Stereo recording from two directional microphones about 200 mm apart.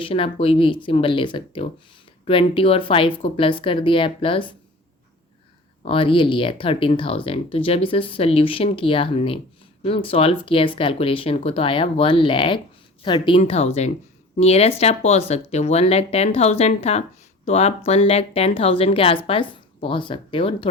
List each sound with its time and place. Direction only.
0.0 s speech: 25° left (ahead or behind)
5.8 s speech: 25° left (ahead or behind)